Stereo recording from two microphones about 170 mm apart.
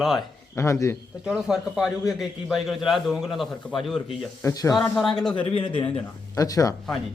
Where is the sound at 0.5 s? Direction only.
15° left (ahead or behind).